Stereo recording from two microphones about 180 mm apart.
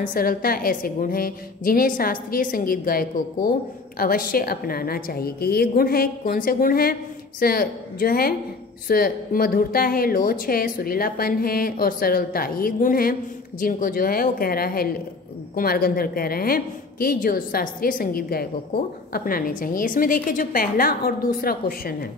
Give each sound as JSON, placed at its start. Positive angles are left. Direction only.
{"t": 0.0, "sound": "a woman's voice", "side_deg": 50}